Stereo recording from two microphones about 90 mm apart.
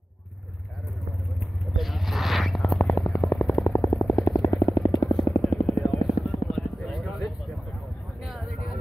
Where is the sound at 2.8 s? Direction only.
30° left (ahead or behind).